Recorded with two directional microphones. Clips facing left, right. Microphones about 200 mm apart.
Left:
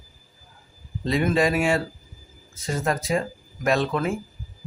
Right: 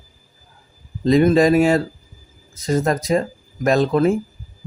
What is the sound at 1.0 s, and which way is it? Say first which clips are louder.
Speech: right 8 dB; 40° right (ahead or behind).